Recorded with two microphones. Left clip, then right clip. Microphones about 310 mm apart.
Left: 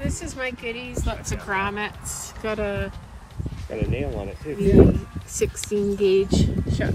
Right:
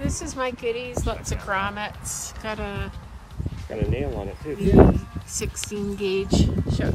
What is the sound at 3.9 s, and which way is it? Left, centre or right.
Speech, right.